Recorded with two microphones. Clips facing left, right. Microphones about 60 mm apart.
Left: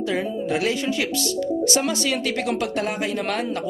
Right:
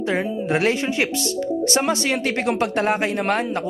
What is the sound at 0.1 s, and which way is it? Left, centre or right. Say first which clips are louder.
Speech: right 4 dB; right.